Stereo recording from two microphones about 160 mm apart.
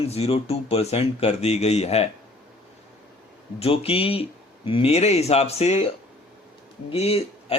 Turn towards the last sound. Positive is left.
turn(degrees=40)  # may be behind; listen again after turning